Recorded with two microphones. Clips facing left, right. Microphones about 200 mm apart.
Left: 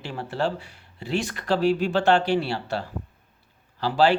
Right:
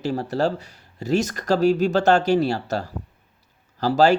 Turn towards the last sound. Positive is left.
turn(degrees=-45)  # may be behind; listen again after turning